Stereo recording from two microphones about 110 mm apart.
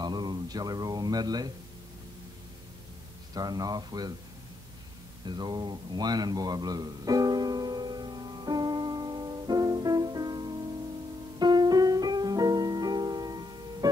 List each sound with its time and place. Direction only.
0.0 s speech: 40° right (ahead or behind)
3.3 s speech: 35° right (ahead or behind)
5.2 s a sound: 40° right (ahead or behind)
11.3 s music: 40° right (ahead or behind)